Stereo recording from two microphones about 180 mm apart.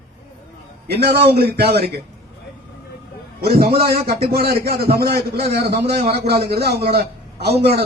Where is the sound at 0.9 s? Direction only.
65° right (ahead or behind).